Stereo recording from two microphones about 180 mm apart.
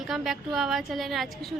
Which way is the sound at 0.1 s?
Centre (ahead or behind).